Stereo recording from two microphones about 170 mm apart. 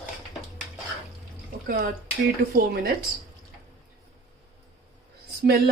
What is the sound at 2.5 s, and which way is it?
Speech, 60° right (ahead or behind).